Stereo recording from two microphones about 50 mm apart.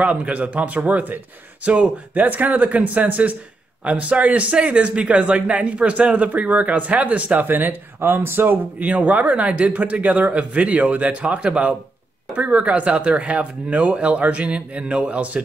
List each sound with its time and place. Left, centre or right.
0.0 s speech: right